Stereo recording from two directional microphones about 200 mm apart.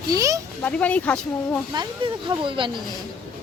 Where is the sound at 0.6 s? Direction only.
5° left (ahead or behind).